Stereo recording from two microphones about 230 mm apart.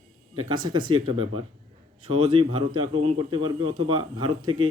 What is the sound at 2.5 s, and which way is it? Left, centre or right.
A man's voice, right.